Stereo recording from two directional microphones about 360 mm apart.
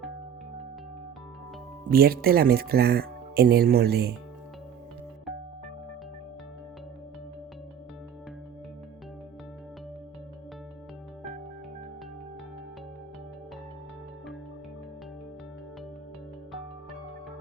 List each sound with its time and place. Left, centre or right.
1.9 s speech: right